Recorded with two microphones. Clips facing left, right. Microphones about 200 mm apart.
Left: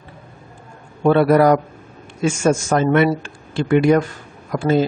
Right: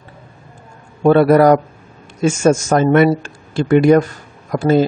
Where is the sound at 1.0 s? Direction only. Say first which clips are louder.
Right 3 dB; 45° right (ahead or behind).